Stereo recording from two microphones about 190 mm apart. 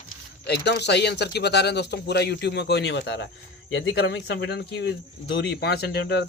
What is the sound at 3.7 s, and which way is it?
Speech, 80° left.